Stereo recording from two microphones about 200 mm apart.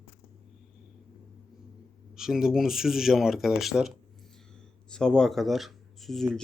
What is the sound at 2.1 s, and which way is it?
Speech, centre (ahead or behind).